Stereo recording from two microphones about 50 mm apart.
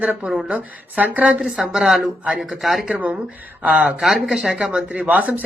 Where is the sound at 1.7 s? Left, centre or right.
Centre.